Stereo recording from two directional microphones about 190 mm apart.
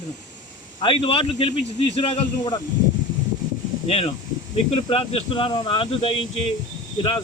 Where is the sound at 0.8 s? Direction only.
25° left (ahead or behind).